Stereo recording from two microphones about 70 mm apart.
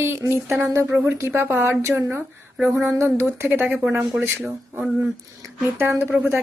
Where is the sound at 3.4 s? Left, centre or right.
Right.